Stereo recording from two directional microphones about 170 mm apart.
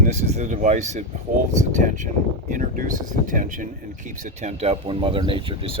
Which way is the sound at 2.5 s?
50° right (ahead or behind).